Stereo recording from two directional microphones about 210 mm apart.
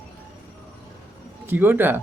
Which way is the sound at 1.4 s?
10° right (ahead or behind).